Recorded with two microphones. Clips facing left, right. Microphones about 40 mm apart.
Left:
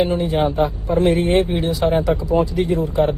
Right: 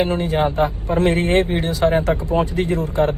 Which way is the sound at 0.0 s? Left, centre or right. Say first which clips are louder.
Left 1 dB; right.